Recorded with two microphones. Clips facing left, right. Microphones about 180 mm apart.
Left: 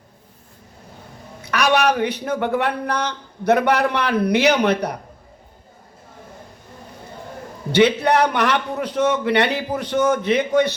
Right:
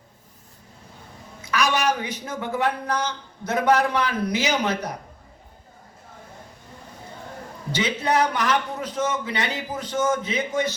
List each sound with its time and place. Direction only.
1.4 s speech: 65° left (ahead or behind)
7.7 s speech: 65° left (ahead or behind)